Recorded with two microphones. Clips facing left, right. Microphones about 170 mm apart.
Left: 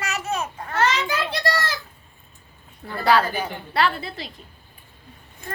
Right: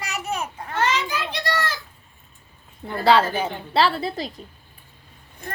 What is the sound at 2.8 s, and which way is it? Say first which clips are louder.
A woman's voice: right 2 dB; 25° right (ahead or behind).